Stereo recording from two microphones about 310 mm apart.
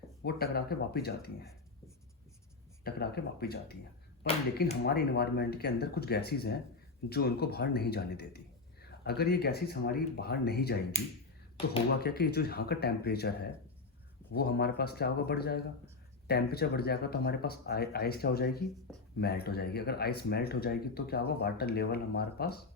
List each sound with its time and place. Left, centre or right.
0.2 s speech: left
2.8 s speech: left
18.9 s a sound: centre
19.2 s speech: left